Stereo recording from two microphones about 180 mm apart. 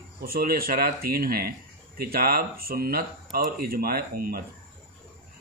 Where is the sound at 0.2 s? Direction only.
55° right (ahead or behind).